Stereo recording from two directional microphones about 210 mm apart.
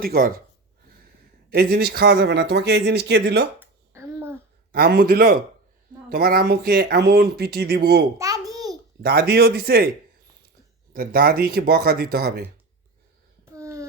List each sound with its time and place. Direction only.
0.0 s speech: 45° right (ahead or behind)
1.5 s speech: 50° right (ahead or behind)
3.6 s finger snapping: 10° right (ahead or behind)
4.7 s speech: 45° right (ahead or behind)
8.2 s a sound: 15° right (ahead or behind)
9.0 s speech: 50° right (ahead or behind)
10.9 s speech: 45° right (ahead or behind)
13.4 s a sound: 15° right (ahead or behind)